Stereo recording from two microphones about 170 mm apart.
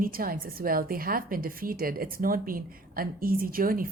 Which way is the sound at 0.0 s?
60° right (ahead or behind).